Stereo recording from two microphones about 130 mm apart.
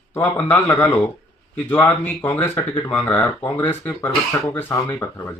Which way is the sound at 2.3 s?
15° left (ahead or behind).